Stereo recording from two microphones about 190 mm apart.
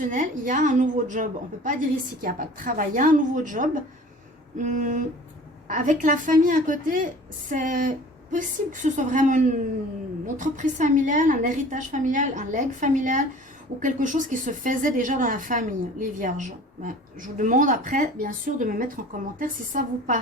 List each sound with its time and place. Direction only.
0.1 s a woman's voice: 45° right (ahead or behind)